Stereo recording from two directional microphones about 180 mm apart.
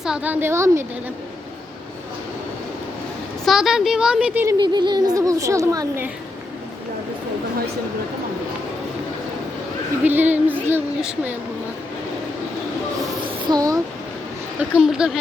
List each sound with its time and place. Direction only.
0.0 s speech: 5° right (ahead or behind)
3.4 s a woman's voice: centre (ahead or behind)
4.4 s speech: 25° right (ahead or behind)
10.0 s speech: 10° right (ahead or behind)
13.2 s a sound: 20° right (ahead or behind)
14.6 s a woman's voice: 5° right (ahead or behind)